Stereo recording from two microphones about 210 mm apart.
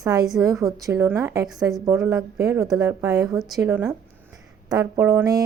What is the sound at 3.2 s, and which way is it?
A woman's voice, centre (ahead or behind).